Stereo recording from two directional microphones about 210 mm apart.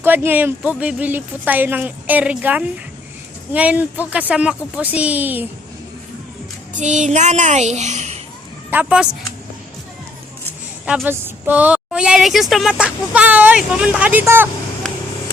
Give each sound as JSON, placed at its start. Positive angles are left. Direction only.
{"t": 0.0, "sound": "speech", "side_deg": -10}
{"t": 6.7, "sound": "a child's voice", "side_deg": -35}
{"t": 8.7, "sound": "a woman's voice", "side_deg": -5}
{"t": 10.8, "sound": "a woman's voice", "side_deg": -5}